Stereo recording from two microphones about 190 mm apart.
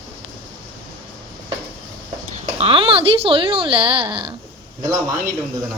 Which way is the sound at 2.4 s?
30° right (ahead or behind).